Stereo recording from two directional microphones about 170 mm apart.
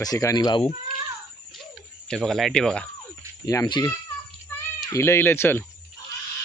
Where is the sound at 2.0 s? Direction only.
5° left (ahead or behind).